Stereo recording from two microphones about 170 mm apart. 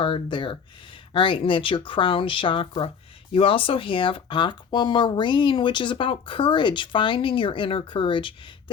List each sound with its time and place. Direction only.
0.0 s speech: 30° left (ahead or behind)